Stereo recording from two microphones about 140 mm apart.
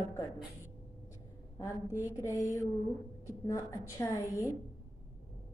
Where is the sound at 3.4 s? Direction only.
25° left (ahead or behind).